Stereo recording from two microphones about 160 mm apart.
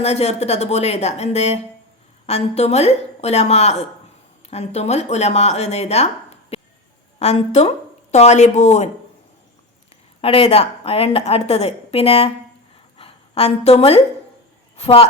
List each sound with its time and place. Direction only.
0.0 s a woman's voice: 40° left (ahead or behind)
10.2 s a woman's voice: 35° left (ahead or behind)